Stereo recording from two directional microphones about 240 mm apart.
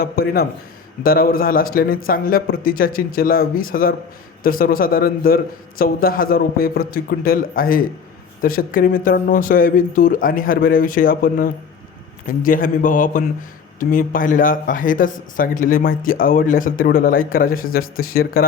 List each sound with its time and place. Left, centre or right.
0.0 s speech: left